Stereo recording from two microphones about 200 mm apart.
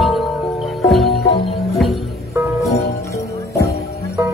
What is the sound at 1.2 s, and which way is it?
Music, 55° left (ahead or behind).